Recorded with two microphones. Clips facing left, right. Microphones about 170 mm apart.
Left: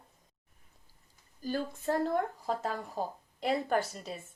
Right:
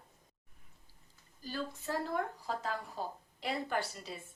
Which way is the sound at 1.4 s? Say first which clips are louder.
Left 6 dB; 50° left (ahead or behind).